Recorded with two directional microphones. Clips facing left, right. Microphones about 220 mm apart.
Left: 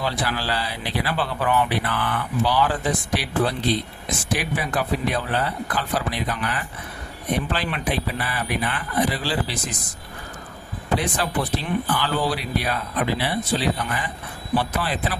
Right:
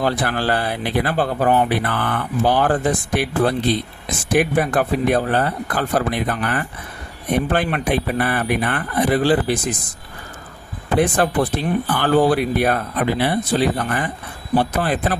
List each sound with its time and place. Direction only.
0.0 s speech: 50° right (ahead or behind)
10.9 s speech: 50° right (ahead or behind)